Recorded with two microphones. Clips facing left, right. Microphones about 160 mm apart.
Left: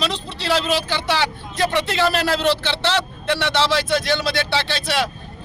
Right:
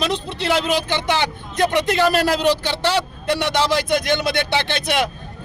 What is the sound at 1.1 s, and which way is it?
Vehicle, 50° right (ahead or behind).